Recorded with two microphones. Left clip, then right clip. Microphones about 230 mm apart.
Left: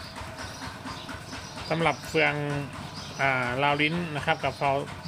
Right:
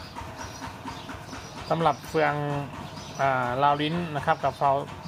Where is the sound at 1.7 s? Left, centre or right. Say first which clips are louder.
Right 2 dB; centre.